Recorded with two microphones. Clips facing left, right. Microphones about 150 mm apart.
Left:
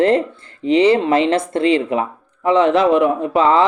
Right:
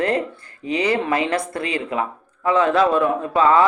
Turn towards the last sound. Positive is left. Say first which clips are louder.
# left 2 dB
turn(degrees=25)  # may be behind; listen again after turning